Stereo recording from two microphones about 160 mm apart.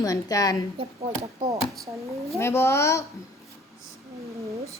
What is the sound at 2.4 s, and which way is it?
Speech, 15° left (ahead or behind).